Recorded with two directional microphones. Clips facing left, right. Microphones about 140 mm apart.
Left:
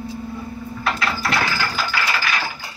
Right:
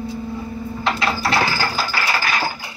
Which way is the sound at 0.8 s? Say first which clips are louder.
Right 2 dB; 25° right (ahead or behind).